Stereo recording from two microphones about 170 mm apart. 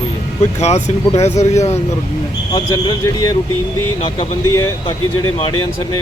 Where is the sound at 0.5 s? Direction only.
40° left (ahead or behind).